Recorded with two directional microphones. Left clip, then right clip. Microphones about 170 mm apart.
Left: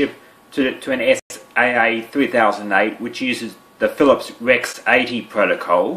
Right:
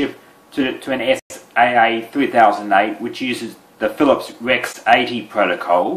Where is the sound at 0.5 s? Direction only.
45° left (ahead or behind).